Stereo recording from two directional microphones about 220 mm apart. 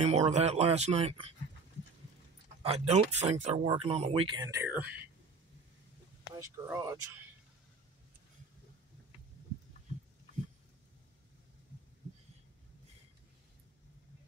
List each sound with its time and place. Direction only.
0.0 s speech: 30° right (ahead or behind)
2.6 s speech: 30° right (ahead or behind); by 5.0 s 10° right (ahead or behind)
6.3 s speech: 15° right (ahead or behind)